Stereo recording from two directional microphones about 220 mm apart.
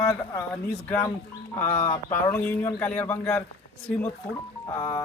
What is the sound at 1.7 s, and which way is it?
Speech, 35° left (ahead or behind).